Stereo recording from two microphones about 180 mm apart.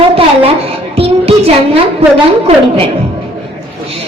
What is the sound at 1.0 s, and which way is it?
Music, 35° right (ahead or behind).